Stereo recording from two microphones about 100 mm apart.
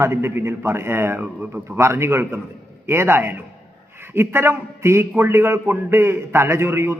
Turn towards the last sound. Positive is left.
turn(degrees=-25)  # may be behind; listen again after turning